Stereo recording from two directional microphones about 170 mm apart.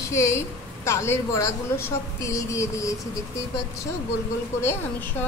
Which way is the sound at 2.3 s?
20° left (ahead or behind).